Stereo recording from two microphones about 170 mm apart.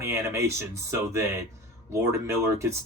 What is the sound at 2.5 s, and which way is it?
Speech, 15° right (ahead or behind).